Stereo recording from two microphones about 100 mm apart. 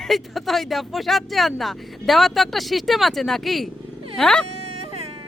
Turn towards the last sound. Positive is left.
turn(degrees=5)  # may be behind; listen again after turning